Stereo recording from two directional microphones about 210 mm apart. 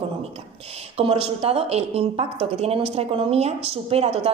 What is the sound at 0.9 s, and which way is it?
A woman's voice, 30° right (ahead or behind).